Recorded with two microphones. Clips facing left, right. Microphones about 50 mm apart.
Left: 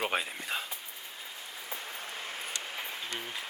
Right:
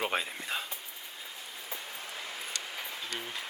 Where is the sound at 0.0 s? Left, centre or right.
Centre.